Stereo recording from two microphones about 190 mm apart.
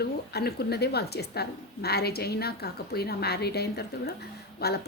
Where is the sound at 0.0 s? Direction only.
55° left (ahead or behind).